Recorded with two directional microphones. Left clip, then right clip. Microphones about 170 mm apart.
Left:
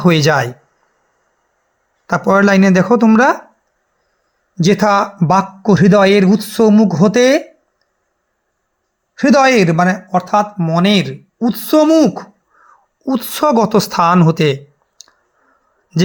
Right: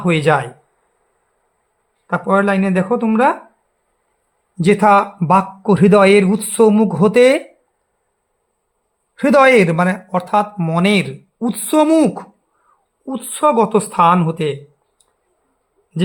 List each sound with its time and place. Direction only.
0.0 s speech: 30° left (ahead or behind)
2.0 s speech: 30° left (ahead or behind)
4.6 s speech: 15° left (ahead or behind)
9.1 s speech: centre (ahead or behind)
13.1 s speech: 30° left (ahead or behind)